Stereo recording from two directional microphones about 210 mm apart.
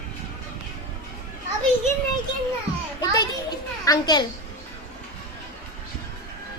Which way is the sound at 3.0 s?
15° left (ahead or behind).